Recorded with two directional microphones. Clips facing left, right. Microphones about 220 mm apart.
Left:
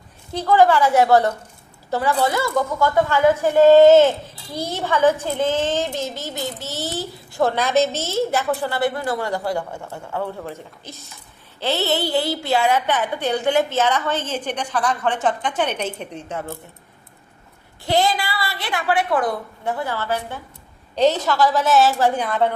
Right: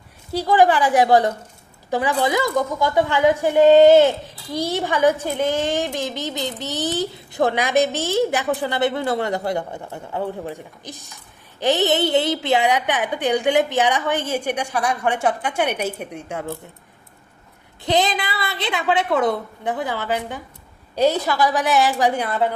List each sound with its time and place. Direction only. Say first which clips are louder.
0.3 s a child's voice: left 1 dB; 15° right (ahead or behind)
17.8 s a woman's voice: even; 20° right (ahead or behind)